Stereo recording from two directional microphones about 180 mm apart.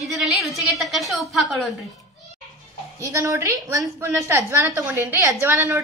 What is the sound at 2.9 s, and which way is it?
A woman's voice, 15° right (ahead or behind).